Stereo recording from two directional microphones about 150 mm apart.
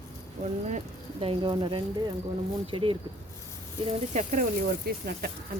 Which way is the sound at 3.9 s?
60° right (ahead or behind).